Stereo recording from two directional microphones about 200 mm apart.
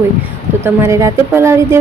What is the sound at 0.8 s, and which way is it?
Speech, 15° right (ahead or behind).